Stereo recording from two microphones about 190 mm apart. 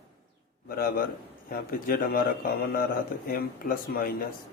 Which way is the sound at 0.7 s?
50° left (ahead or behind).